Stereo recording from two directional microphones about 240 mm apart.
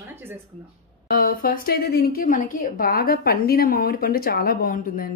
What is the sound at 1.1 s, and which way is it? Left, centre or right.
A woman's voice, left.